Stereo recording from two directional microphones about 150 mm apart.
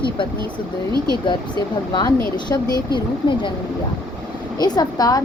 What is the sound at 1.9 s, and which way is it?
Speech, 25° left (ahead or behind).